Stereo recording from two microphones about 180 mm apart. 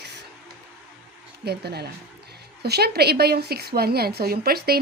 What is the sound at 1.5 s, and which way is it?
A woman's voice, 65° right (ahead or behind).